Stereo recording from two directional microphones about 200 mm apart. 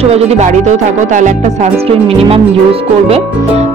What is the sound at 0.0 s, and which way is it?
Speech, 30° right (ahead or behind).